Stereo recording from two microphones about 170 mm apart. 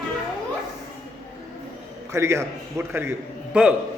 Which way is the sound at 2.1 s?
15° right (ahead or behind).